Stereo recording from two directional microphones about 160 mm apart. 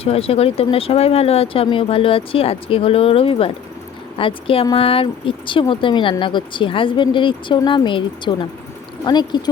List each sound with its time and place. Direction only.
0.0 s speech: 40° left (ahead or behind)